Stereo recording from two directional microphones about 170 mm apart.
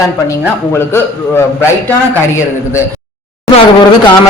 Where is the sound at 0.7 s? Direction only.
15° left (ahead or behind).